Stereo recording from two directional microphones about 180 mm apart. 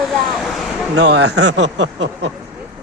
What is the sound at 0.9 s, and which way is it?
Speech, 75° right (ahead or behind).